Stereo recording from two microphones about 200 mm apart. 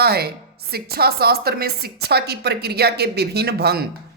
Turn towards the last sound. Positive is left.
turn(degrees=-55)  # may be behind; listen again after turning